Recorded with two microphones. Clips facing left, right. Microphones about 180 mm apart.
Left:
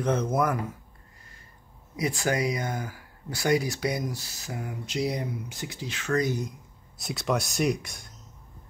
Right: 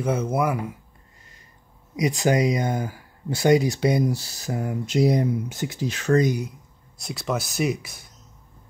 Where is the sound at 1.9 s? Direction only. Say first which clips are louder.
Right 6 dB; 15° right (ahead or behind); by 6.2 s 40° right (ahead or behind).